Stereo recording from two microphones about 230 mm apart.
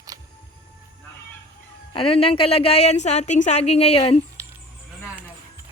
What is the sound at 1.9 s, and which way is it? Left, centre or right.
A woman's voice, left.